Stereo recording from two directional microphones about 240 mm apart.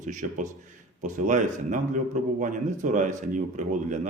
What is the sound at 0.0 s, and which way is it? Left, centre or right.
Speech, right.